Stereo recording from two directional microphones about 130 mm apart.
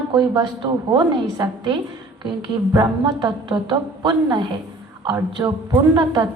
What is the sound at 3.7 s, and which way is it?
Speech, 35° right (ahead or behind).